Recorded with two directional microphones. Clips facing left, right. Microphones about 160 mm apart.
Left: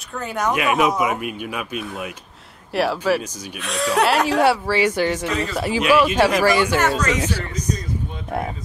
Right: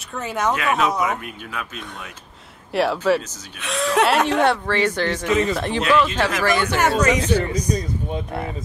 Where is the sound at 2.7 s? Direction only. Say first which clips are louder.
Right 1 dB; centre (ahead or behind).